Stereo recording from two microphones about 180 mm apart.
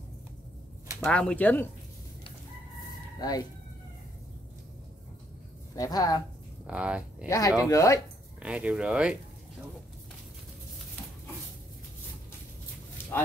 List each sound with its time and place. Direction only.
1.0 s speech: 5° left (ahead or behind)
3.2 s speech: 20° left (ahead or behind)
5.8 s a woman's voice: 20° left (ahead or behind)
6.7 s speech: 5° right (ahead or behind)
7.2 s a woman's voice: 20° left (ahead or behind)
8.4 s speech: 5° right (ahead or behind)